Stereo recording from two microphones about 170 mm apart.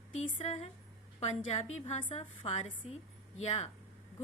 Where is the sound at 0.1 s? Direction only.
40° left (ahead or behind).